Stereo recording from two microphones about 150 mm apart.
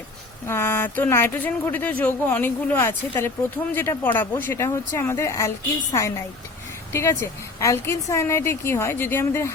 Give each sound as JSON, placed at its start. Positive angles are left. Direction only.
{"t": 0.4, "sound": "speech", "side_deg": 15}
{"t": 6.9, "sound": "speech", "side_deg": 20}